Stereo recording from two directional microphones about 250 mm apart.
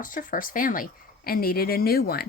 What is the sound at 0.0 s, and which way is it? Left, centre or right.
Speech, left.